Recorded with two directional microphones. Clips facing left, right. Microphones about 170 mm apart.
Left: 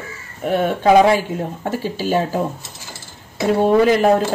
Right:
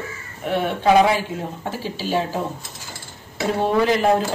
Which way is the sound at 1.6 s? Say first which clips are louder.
Left 5 dB; 50° left (ahead or behind).